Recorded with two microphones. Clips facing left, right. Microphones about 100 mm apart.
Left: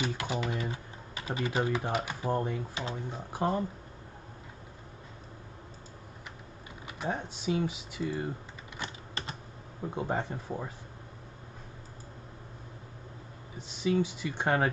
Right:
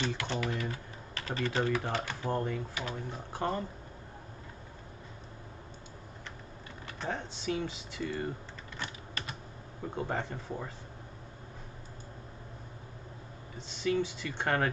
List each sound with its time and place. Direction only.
0.0 s typewriter: 10° left (ahead or behind)
0.4 s speech: 20° left (ahead or behind)
2.7 s speech: 25° left (ahead or behind)
3.3 s speech: 5° left (ahead or behind)
6.9 s speech: 10° left (ahead or behind)
8.8 s typing: 30° left (ahead or behind)
9.9 s speech: 10° left (ahead or behind)
13.6 s speech: 15° left (ahead or behind)